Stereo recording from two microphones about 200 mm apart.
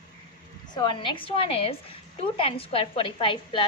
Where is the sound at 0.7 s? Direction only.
25° left (ahead or behind).